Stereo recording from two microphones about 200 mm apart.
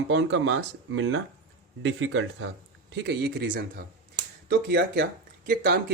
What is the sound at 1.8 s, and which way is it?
Speech, 70° right (ahead or behind).